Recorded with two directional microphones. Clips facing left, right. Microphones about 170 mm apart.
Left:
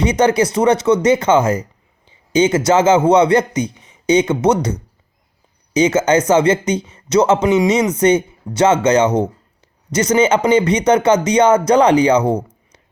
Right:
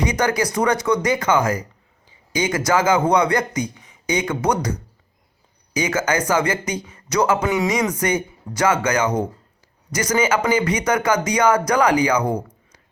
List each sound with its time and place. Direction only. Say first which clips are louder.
0.1 s speech: left 6 dB; 25° left (ahead or behind)
5.7 s speech: left 8 dB; 25° left (ahead or behind)